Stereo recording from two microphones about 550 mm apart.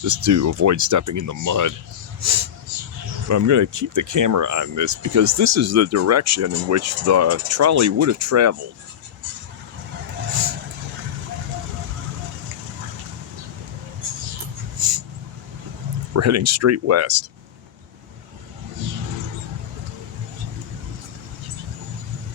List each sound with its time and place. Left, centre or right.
0.0 s speech: right
14.8 s a sound: right
16.1 s speech: right